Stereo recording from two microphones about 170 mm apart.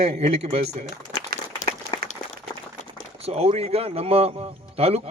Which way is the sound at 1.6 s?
35° left (ahead or behind).